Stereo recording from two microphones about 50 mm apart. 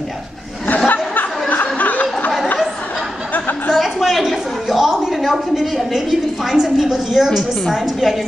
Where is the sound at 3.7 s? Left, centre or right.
Centre.